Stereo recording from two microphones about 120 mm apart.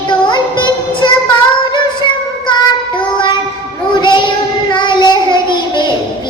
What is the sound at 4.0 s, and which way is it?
Child singing, 40° left (ahead or behind).